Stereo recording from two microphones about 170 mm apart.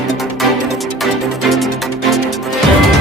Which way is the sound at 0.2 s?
Centre (ahead or behind).